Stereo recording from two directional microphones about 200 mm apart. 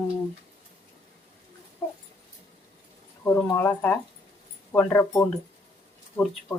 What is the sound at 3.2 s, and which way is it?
Speech, 15° left (ahead or behind).